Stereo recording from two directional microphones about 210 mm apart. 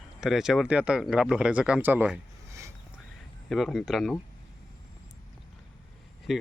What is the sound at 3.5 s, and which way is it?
Speech, centre (ahead or behind).